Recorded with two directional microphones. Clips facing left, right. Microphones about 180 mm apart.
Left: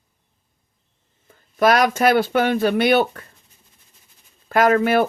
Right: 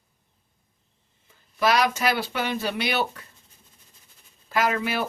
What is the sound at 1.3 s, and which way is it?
Speech, 50° left (ahead or behind).